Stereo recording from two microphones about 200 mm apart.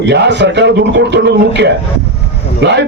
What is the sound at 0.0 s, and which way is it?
A man's voice, 60° right (ahead or behind).